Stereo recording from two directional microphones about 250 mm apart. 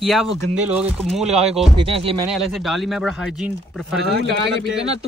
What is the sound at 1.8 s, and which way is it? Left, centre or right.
Speech, right.